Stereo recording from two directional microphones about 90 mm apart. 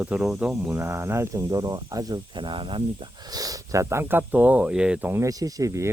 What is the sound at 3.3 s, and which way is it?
Speech, 40° right (ahead or behind).